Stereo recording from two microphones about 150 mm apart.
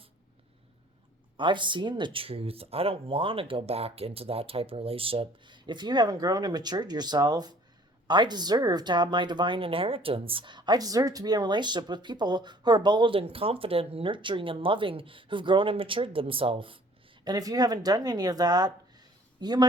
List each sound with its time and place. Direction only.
1.4 s speech: 30° right (ahead or behind)
17.2 s speech: 25° right (ahead or behind)